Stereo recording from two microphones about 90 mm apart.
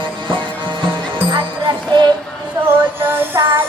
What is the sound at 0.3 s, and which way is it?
Music, 60° right (ahead or behind).